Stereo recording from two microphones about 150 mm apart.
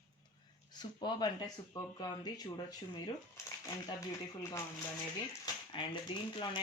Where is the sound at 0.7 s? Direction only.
30° left (ahead or behind).